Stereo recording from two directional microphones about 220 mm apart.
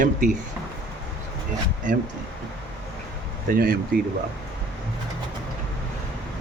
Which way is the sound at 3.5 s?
40° right (ahead or behind).